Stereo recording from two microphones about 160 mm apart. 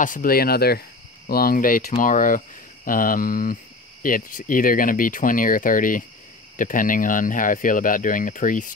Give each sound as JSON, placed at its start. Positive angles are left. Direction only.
{"t": 0.0, "sound": "speech", "side_deg": 60}